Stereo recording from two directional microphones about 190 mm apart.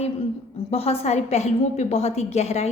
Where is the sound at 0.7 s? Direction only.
30° left (ahead or behind).